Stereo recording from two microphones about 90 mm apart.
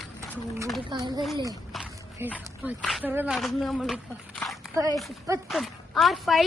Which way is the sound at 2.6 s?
15° right (ahead or behind).